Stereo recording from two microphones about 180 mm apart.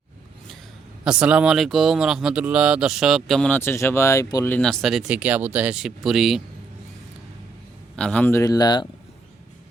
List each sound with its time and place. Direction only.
1.0 s speech: 5° right (ahead or behind); by 4.5 s 20° left (ahead or behind)
4.5 s speech: 5° left (ahead or behind)
7.9 s speech: 5° left (ahead or behind); by 8.9 s 20° left (ahead or behind)